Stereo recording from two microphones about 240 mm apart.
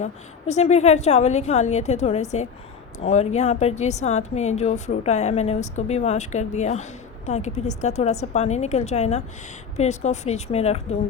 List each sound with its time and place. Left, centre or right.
0.0 s a woman's voice: left